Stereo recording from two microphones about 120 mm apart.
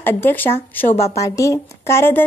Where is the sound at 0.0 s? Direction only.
15° left (ahead or behind).